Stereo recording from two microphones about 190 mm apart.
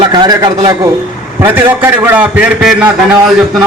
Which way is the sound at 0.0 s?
20° right (ahead or behind).